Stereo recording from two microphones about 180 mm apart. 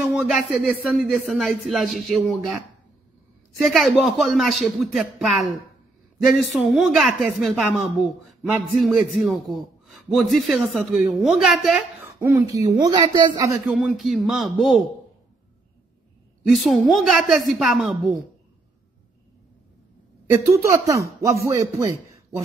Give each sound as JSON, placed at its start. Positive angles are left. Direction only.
{"t": 0.0, "sound": "speech", "side_deg": 0}
{"t": 3.6, "sound": "a woman's voice", "side_deg": 0}
{"t": 13.7, "sound": "speech", "side_deg": 0}
{"t": 16.4, "sound": "speech", "side_deg": 0}
{"t": 20.2, "sound": "speech", "side_deg": -15}